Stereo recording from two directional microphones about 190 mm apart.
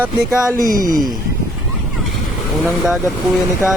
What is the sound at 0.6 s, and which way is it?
Speech, 45° right (ahead or behind).